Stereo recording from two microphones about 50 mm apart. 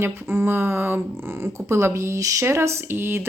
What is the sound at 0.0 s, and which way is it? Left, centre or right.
Speech, right.